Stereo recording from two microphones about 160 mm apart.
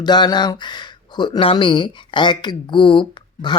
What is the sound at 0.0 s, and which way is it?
Speech, 25° left (ahead or behind).